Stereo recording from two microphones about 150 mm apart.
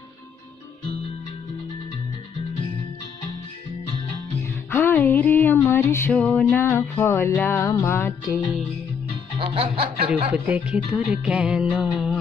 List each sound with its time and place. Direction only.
4.6 s music: 15° left (ahead or behind)
9.4 s music: 35° right (ahead or behind)
10.3 s music: 10° right (ahead or behind)